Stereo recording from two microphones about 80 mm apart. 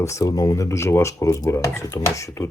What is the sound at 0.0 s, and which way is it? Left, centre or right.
Speech, left.